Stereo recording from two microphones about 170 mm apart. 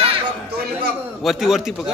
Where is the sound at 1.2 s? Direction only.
Centre (ahead or behind).